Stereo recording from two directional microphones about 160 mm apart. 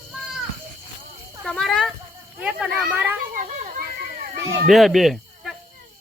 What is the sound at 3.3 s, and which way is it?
Children playing, 55° right (ahead or behind).